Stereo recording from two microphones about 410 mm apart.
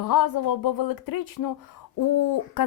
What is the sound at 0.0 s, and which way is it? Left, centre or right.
A woman's voice, left.